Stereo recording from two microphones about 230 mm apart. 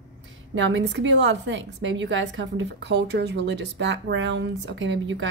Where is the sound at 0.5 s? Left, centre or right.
Right.